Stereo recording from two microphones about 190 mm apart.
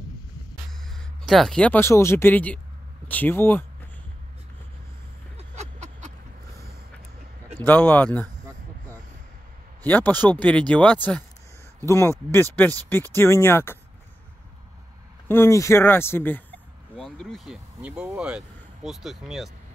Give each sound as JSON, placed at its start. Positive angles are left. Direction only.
{"t": 0.7, "sound": "speech", "side_deg": 0}
{"t": 5.5, "sound": "a sound", "side_deg": -40}
{"t": 7.6, "sound": "speech", "side_deg": 10}
{"t": 8.4, "sound": "a sound", "side_deg": -20}
{"t": 9.8, "sound": "speech", "side_deg": 10}
{"t": 15.2, "sound": "speech", "side_deg": 10}